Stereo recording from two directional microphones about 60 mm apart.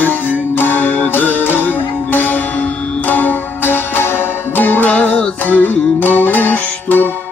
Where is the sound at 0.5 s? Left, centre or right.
Left.